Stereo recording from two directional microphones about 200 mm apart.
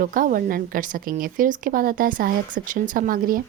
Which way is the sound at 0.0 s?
45° right (ahead or behind).